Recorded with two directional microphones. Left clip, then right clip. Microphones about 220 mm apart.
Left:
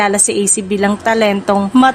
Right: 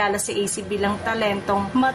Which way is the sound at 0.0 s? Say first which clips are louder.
Left 8 dB; 45° left (ahead or behind).